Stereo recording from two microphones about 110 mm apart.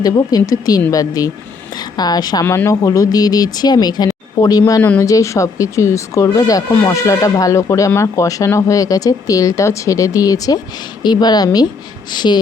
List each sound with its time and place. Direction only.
0.0 s speech: 35° left (ahead or behind)
2.4 s speech: 25° left (ahead or behind); by 12.4 s 40° left (ahead or behind)